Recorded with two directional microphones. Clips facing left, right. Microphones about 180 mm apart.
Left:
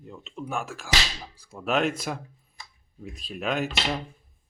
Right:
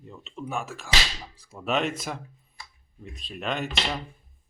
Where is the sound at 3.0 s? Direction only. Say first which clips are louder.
Left 2 dB; centre (ahead or behind).